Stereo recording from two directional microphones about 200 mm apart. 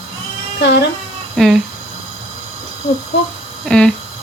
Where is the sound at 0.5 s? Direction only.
60° left (ahead or behind).